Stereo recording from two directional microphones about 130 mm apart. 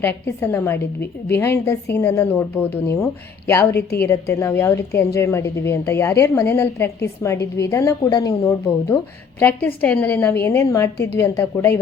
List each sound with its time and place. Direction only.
0.0 s a woman's voice: 15° left (ahead or behind)